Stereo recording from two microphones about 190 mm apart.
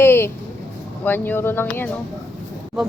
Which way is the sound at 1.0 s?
10° left (ahead or behind).